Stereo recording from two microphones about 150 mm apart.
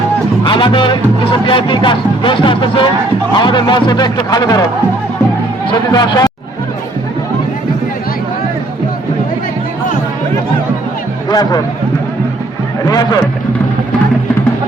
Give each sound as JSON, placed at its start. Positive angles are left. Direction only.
{"t": 0.4, "sound": "speech", "side_deg": 35}
{"t": 5.9, "sound": "speech", "side_deg": 25}
{"t": 11.3, "sound": "speech", "side_deg": 25}
{"t": 12.9, "sound": "speech", "side_deg": 25}